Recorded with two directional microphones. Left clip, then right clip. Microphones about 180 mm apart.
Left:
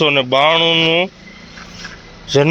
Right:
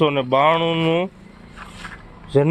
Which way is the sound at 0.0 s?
15° right (ahead or behind).